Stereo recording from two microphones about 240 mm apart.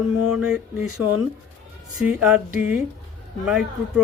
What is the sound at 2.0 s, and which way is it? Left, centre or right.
Speech, centre.